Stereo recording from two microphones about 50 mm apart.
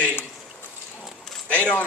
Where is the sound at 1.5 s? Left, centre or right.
Left.